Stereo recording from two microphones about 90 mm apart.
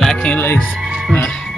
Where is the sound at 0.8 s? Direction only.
5° right (ahead or behind).